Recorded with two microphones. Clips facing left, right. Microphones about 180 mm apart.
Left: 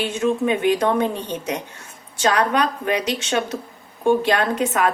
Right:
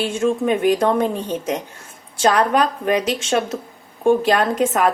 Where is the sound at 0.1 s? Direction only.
45° right (ahead or behind).